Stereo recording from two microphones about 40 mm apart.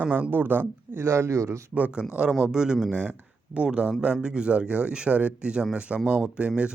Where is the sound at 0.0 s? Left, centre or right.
Right.